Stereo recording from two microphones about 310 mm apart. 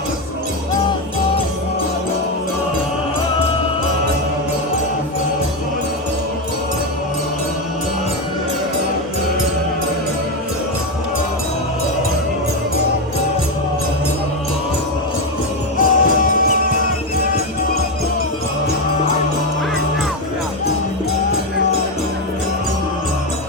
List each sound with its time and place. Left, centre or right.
15.8 s music: left